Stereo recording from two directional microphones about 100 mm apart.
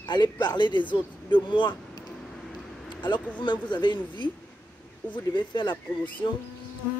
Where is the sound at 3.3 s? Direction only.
50° left (ahead or behind).